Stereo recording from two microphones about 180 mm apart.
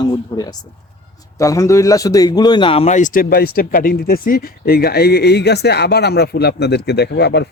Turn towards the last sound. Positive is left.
turn(degrees=65)  # may be behind; listen again after turning